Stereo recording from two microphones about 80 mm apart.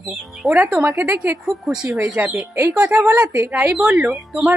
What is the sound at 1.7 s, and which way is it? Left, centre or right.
Speech, centre.